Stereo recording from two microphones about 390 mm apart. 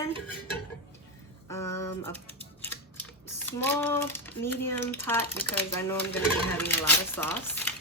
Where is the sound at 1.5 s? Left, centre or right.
Centre.